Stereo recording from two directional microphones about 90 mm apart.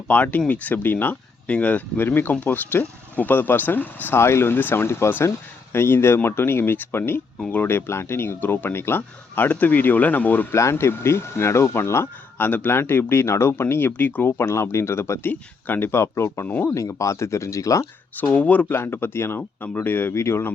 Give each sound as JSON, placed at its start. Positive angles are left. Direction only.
{"t": 0.1, "sound": "speech", "side_deg": 15}
{"t": 10.5, "sound": "speech", "side_deg": 30}
{"t": 18.2, "sound": "speech", "side_deg": 20}